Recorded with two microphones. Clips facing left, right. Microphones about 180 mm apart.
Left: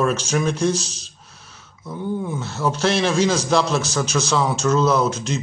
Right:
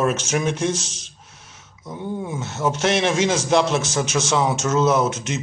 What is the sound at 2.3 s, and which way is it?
A man's voice, 20° right (ahead or behind).